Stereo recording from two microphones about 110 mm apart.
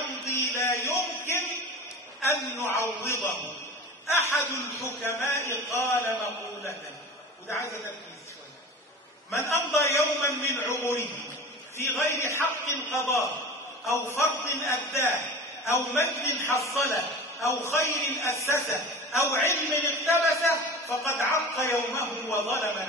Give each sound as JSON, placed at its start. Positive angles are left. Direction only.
{"t": 0.2, "sound": "a sound", "side_deg": 25}
{"t": 2.2, "sound": "a man's voice", "side_deg": 25}
{"t": 4.2, "sound": "a man's voice", "side_deg": 25}
{"t": 9.3, "sound": "a man's voice", "side_deg": 25}
{"t": 14.6, "sound": "a man's voice", "side_deg": 0}
{"t": 15.0, "sound": "a man's voice", "side_deg": 25}